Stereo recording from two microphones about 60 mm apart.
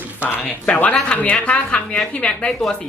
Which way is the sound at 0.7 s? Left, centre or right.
Left.